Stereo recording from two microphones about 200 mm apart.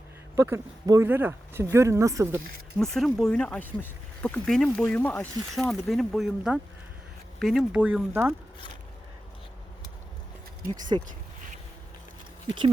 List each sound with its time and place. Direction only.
0.3 s speech: 15° right (ahead or behind)
2.7 s speech: centre (ahead or behind)
10.9 s speech: 25° right (ahead or behind)